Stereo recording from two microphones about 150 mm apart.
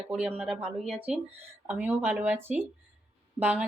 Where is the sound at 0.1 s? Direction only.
5° right (ahead or behind).